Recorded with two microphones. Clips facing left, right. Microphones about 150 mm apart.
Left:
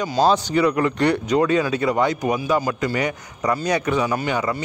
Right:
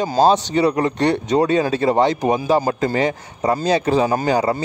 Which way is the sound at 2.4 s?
40° right (ahead or behind).